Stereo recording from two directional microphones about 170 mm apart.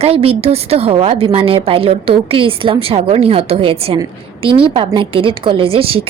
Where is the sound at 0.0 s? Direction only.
35° right (ahead or behind).